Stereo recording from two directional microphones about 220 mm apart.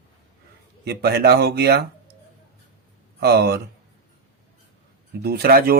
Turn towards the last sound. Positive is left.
turn(degrees=-45)  # may be behind; listen again after turning